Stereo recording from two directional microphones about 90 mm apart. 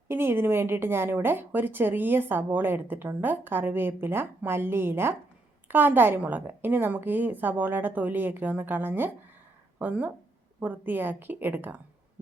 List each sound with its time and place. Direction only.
0.1 s a woman's voice: 25° right (ahead or behind)